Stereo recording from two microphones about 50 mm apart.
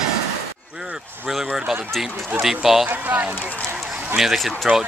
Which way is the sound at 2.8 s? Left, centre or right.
Right.